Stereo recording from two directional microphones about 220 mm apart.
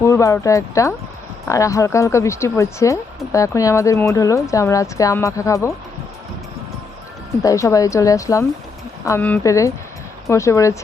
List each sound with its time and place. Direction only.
0.0 s speech: 15° left (ahead or behind)
7.4 s speech: 15° left (ahead or behind)